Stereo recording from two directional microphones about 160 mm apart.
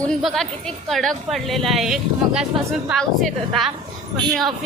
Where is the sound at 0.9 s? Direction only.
Centre (ahead or behind).